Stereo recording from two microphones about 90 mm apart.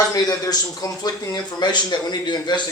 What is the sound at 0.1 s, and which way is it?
A man's voice, 45° left (ahead or behind).